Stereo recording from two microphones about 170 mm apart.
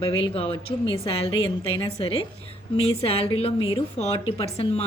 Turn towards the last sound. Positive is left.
turn(degrees=35)  # may be behind; listen again after turning